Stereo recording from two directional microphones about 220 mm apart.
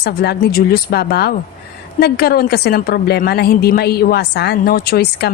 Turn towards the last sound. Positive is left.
turn(degrees=45)  # may be behind; listen again after turning